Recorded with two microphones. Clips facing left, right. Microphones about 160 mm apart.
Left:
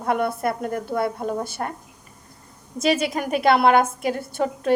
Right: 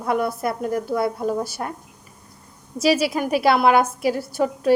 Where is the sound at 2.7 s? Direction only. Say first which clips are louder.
Right 2 dB; 50° left (ahead or behind).